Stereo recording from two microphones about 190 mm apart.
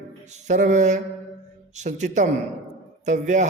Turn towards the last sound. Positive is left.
turn(degrees=-40)  # may be behind; listen again after turning